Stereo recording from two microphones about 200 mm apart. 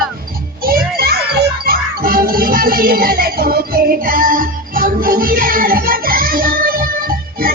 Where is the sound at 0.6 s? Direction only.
45° right (ahead or behind).